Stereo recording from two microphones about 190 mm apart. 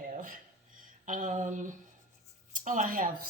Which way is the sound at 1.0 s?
45° right (ahead or behind).